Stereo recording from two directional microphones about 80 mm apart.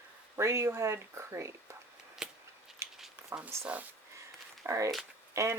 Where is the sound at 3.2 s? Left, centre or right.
Centre.